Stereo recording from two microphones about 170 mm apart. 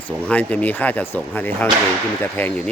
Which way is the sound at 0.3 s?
10° left (ahead or behind).